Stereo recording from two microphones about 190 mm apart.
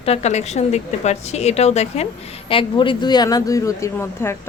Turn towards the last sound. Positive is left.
turn(degrees=15)  # may be behind; listen again after turning